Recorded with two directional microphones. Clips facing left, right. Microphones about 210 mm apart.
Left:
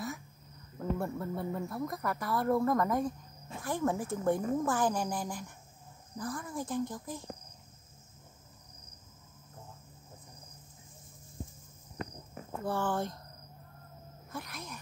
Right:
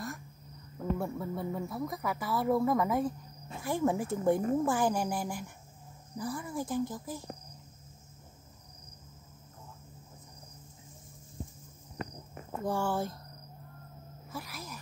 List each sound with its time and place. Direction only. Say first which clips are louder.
0.7 s speech: right 1 dB; centre (ahead or behind)
12.6 s speech: right 1 dB; 10° right (ahead or behind)
14.3 s speech: even; 5° right (ahead or behind)